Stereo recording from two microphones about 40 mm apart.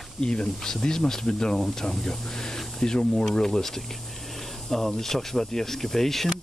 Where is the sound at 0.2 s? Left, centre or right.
Left.